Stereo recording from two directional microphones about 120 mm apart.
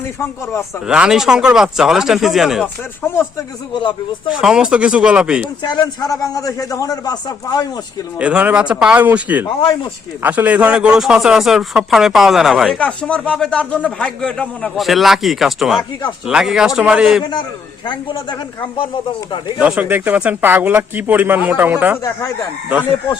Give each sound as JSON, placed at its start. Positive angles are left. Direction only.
{"t": 0.9, "sound": "speech", "side_deg": -5}
{"t": 4.3, "sound": "speech", "side_deg": -5}
{"t": 5.6, "sound": "a man's voice", "side_deg": 35}
{"t": 8.2, "sound": "speech", "side_deg": -10}
{"t": 12.8, "sound": "a man's voice", "side_deg": 10}
{"t": 17.8, "sound": "a man's voice", "side_deg": 40}
{"t": 19.5, "sound": "speech", "side_deg": -10}